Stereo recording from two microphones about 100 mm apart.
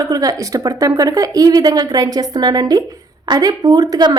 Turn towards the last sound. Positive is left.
turn(degrees=-45)  # may be behind; listen again after turning